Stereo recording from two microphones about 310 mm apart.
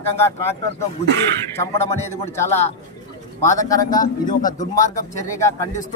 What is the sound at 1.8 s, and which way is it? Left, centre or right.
Speech, centre.